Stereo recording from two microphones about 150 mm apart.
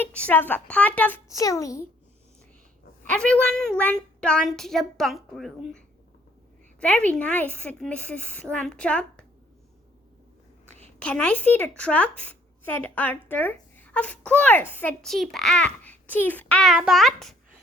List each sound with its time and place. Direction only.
0.0 s a child's voice: 10° left (ahead or behind)
1.3 s a child's voice: 20° left (ahead or behind)
3.1 s a woman's voice: 10° left (ahead or behind)
11.0 s a child's voice: 10° left (ahead or behind)
15.0 s a child's voice: centre (ahead or behind)